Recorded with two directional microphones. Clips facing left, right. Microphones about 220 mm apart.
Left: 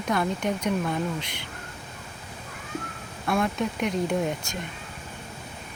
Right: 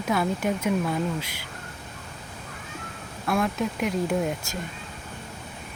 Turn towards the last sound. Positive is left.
turn(degrees=-5)  # may be behind; listen again after turning